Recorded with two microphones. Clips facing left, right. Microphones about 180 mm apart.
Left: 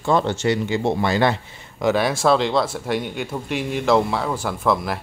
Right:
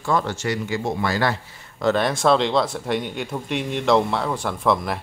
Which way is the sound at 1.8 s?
5° left (ahead or behind).